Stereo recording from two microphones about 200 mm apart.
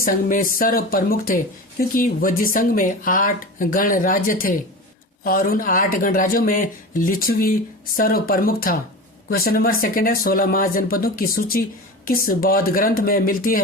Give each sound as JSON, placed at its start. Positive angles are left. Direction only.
{"t": 0.0, "sound": "speech", "side_deg": 45}